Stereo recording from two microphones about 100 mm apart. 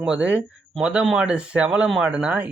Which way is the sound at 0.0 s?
10° right (ahead or behind).